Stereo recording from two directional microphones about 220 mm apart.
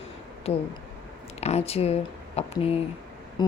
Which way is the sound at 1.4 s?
30° left (ahead or behind).